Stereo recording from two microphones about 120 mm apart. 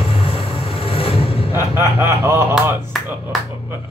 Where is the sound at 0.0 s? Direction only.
50° left (ahead or behind).